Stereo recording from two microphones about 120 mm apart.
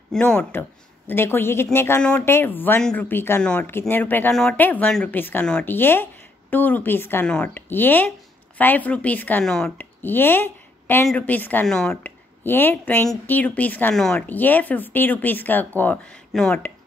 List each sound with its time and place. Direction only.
0.1 s speech: 10° left (ahead or behind)
2.0 s speech: 10° left (ahead or behind)
9.8 s speech: 15° left (ahead or behind)
12.0 s speech: 15° left (ahead or behind)
14.2 s speech: 15° left (ahead or behind)